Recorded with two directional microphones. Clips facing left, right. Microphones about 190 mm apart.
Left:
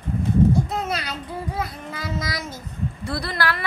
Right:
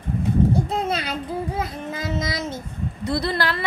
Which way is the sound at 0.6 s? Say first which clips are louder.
Right 3 dB; 30° right (ahead or behind).